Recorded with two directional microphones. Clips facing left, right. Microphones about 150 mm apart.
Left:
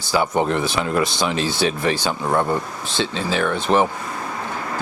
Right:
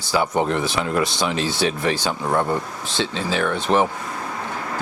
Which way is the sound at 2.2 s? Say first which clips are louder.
Left 1 dB; 25° left (ahead or behind).